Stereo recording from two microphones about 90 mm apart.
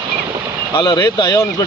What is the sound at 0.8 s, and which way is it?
Speech, 55° left (ahead or behind).